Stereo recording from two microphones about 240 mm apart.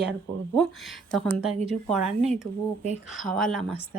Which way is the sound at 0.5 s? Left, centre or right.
Centre.